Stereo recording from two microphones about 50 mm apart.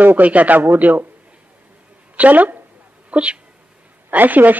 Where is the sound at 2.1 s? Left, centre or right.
Right.